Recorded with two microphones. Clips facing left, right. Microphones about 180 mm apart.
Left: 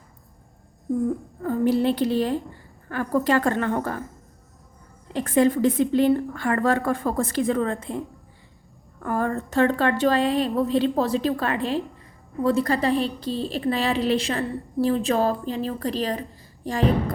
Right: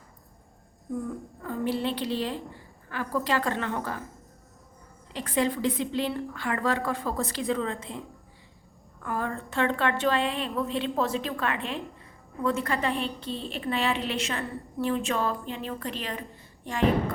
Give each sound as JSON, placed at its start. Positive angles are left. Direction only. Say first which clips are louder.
{"t": 1.5, "sound": "a woman's voice", "louder": "left 8 dB", "side_deg": 45}
{"t": 5.1, "sound": "a woman's voice", "louder": "left 8 dB", "side_deg": 50}
{"t": 9.0, "sound": "a woman's voice", "louder": "left 6 dB", "side_deg": 45}